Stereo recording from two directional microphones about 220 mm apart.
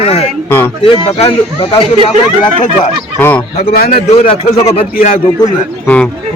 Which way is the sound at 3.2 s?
10° left (ahead or behind).